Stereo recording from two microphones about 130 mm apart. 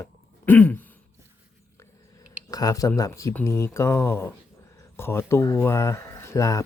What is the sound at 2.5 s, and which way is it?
Speech, 30° left (ahead or behind).